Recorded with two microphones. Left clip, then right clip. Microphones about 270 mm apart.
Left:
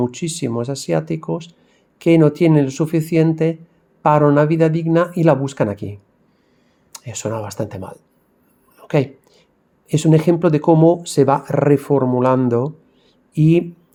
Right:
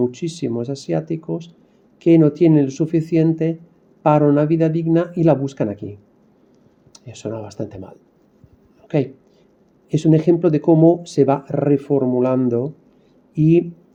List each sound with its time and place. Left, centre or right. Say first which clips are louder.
0.0 s speech: even; left
8.8 s a sound: left 2 dB; left
9.9 s speech: even; left